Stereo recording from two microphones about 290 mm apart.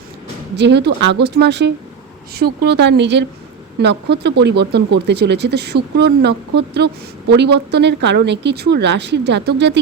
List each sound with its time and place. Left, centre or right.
0.5 s speech: right